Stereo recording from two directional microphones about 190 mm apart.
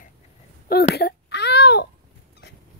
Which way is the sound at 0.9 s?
60° left (ahead or behind).